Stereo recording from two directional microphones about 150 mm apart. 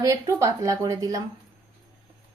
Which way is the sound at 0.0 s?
20° right (ahead or behind).